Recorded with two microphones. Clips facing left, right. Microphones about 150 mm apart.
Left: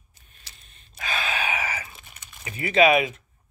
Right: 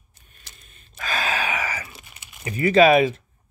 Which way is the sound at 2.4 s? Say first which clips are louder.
Right 4 dB; 40° right (ahead or behind).